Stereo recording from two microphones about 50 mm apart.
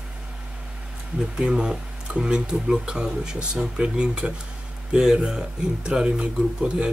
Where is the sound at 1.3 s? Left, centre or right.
Centre.